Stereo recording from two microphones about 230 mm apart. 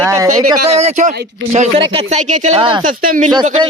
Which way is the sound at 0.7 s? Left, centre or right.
Right.